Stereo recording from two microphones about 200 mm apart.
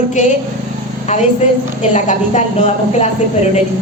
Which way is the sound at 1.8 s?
35° left (ahead or behind).